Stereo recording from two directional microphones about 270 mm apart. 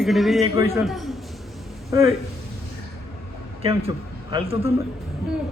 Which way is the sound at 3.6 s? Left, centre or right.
Centre.